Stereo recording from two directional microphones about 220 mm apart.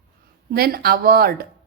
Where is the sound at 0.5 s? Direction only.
45° right (ahead or behind).